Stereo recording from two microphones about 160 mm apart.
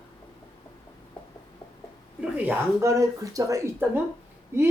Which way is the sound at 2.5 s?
20° right (ahead or behind).